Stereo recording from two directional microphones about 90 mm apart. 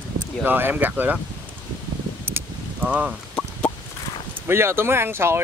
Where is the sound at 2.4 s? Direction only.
25° right (ahead or behind).